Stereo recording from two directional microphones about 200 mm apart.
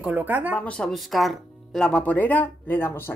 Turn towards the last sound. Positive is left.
turn(degrees=10)  # may be behind; listen again after turning